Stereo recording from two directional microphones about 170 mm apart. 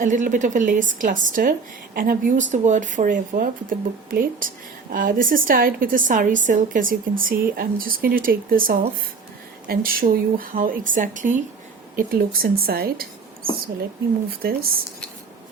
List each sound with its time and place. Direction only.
0.0 s speech: 50° right (ahead or behind)